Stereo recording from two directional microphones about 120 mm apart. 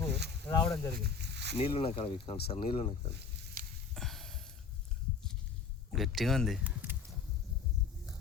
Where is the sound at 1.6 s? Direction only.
50° left (ahead or behind).